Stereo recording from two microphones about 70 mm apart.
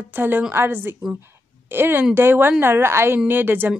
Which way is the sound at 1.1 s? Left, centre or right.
Right.